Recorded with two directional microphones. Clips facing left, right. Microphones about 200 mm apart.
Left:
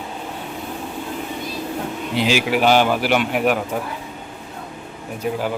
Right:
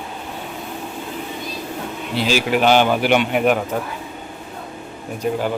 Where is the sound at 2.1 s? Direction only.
15° left (ahead or behind).